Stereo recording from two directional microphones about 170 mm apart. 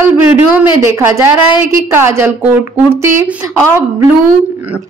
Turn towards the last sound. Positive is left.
turn(degrees=-15)  # may be behind; listen again after turning